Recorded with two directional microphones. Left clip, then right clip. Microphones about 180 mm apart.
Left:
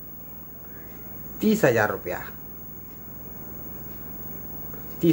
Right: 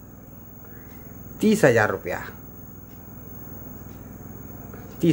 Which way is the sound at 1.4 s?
20° right (ahead or behind).